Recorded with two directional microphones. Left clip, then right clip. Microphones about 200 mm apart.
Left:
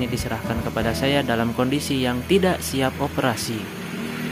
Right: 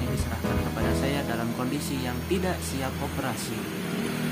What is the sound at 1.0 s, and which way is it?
Speech, 45° left (ahead or behind).